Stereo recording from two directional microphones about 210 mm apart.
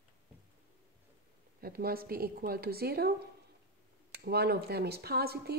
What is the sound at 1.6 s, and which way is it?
Speech, 45° right (ahead or behind).